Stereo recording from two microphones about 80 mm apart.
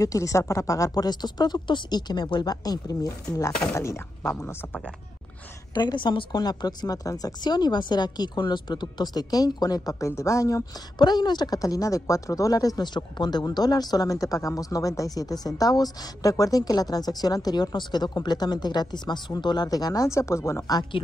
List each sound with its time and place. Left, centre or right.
0.0 s speech: left
3.3 s speech: left
5.8 s a woman's voice: left
11.0 s speech: left
20.9 s a woman's voice: left